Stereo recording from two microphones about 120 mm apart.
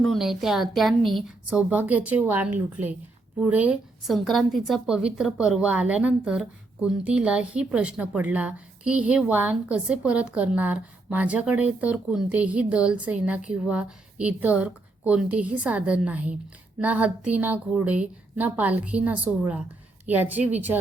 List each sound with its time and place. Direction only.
0.0 s a woman's voice: centre (ahead or behind)
1.5 s a woman's voice: 10° right (ahead or behind)
4.0 s a woman's voice: centre (ahead or behind)